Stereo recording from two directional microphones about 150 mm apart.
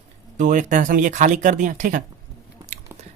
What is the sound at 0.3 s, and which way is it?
Speech, 60° right (ahead or behind).